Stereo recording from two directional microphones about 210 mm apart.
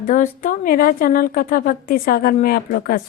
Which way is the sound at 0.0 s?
40° left (ahead or behind).